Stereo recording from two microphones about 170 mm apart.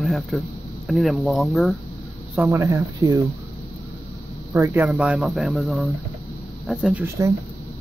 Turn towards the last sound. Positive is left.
turn(degrees=-15)  # may be behind; listen again after turning